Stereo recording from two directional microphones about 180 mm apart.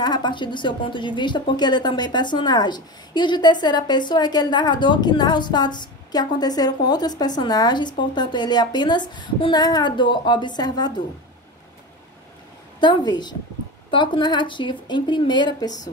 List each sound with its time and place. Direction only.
0.0 s a woman's voice: 25° left (ahead or behind)
13.8 s a woman's voice: 25° left (ahead or behind)